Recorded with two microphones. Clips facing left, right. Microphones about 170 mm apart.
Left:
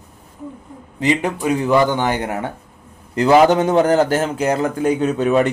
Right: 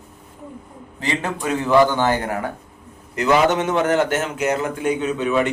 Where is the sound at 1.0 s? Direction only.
15° left (ahead or behind).